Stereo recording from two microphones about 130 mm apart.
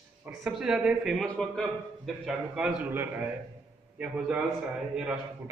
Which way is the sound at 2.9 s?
15° right (ahead or behind).